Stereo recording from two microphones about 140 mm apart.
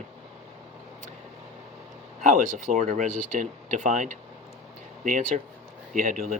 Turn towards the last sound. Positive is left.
turn(degrees=-70)  # may be behind; listen again after turning